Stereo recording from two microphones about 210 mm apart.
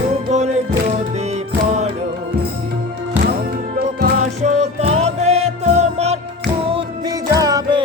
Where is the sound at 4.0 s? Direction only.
30° right (ahead or behind).